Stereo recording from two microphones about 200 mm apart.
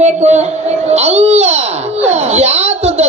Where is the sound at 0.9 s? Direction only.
30° right (ahead or behind).